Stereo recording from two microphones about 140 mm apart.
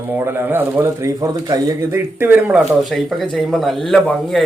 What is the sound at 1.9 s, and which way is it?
Speech, 15° right (ahead or behind).